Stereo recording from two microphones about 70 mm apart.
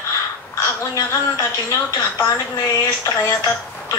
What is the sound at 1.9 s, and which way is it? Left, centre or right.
A woman's voice, left.